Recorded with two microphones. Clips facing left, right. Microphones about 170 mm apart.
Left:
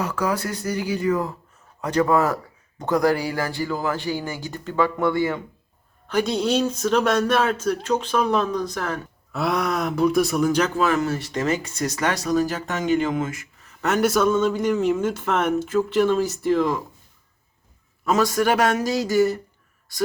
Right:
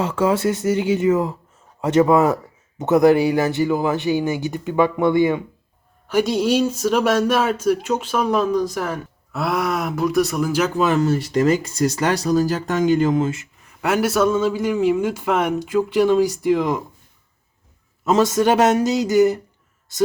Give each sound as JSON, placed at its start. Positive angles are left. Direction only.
{"t": 0.0, "sound": "speech", "side_deg": -25}
{"t": 10.8, "sound": "speech", "side_deg": -25}
{"t": 13.8, "sound": "speech", "side_deg": -10}
{"t": 18.0, "sound": "speech", "side_deg": -25}